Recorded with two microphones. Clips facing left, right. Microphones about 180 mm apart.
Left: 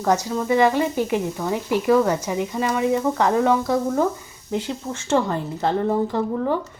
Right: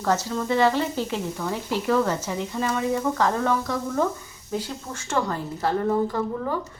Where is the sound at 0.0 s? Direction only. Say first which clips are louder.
Left 3 dB; 15° left (ahead or behind).